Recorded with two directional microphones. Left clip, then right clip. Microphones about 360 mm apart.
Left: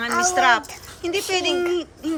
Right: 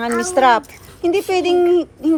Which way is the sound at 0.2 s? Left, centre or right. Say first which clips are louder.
Right 4 dB; centre.